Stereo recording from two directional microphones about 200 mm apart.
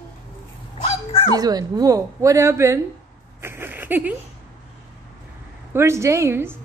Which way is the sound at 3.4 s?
10° right (ahead or behind).